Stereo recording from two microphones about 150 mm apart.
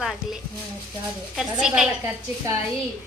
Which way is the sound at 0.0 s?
Centre (ahead or behind).